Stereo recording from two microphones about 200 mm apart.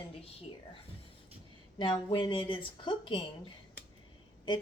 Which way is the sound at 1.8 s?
25° left (ahead or behind).